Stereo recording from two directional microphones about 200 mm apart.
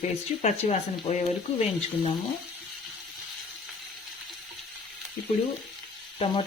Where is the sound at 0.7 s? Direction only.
35° left (ahead or behind).